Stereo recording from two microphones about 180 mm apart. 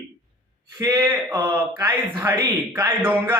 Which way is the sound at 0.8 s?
20° right (ahead or behind).